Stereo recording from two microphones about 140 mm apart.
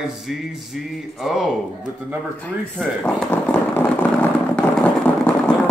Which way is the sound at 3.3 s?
15° left (ahead or behind).